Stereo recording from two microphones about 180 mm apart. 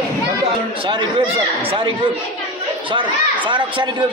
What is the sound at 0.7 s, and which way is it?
Speech, 25° right (ahead or behind).